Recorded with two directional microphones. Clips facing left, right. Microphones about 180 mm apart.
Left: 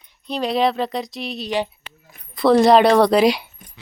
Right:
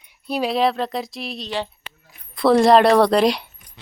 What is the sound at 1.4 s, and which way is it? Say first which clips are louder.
Speech: left 4 dB; 15° left (ahead or behind).